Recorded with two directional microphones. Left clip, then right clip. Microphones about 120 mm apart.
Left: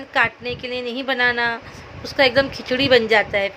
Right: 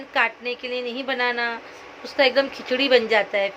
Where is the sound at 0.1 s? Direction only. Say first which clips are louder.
Left 3 dB; 35° left (ahead or behind).